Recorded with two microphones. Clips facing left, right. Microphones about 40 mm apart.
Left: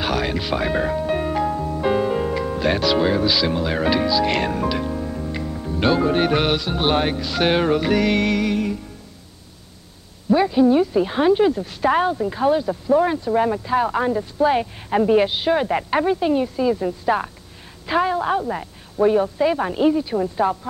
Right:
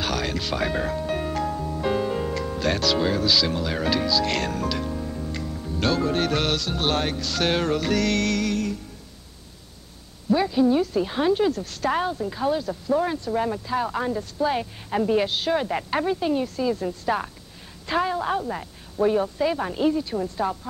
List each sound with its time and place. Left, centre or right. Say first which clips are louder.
0.0 s speech: left 4 dB; centre
10.3 s speech: left 4 dB; centre